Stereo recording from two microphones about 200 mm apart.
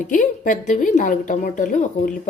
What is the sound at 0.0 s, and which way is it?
A woman's voice, 40° left (ahead or behind).